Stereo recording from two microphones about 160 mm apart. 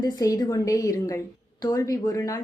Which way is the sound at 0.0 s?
25° left (ahead or behind).